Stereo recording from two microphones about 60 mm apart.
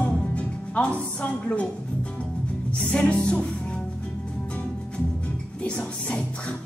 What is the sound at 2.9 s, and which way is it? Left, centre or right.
Music, centre.